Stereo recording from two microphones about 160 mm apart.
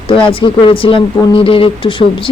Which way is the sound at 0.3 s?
35° left (ahead or behind).